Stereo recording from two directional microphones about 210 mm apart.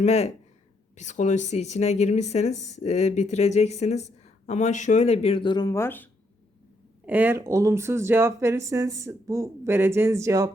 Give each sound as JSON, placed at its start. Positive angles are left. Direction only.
{"t": 0.0, "sound": "speech", "side_deg": 30}
{"t": 7.0, "sound": "speech", "side_deg": -10}